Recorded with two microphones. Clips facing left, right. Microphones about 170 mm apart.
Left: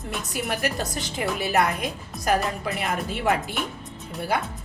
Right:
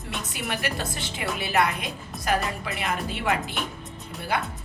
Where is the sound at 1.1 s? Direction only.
Centre (ahead or behind).